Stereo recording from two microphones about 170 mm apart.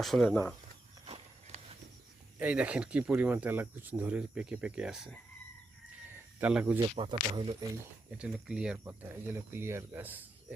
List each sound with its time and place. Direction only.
0.0 s speech: centre (ahead or behind)
1.0 s walk: 35° right (ahead or behind)
2.4 s speech: 10° right (ahead or behind)
6.1 s cricket: 10° right (ahead or behind)
6.8 s speech: 30° right (ahead or behind)
8.1 s speech: 5° right (ahead or behind)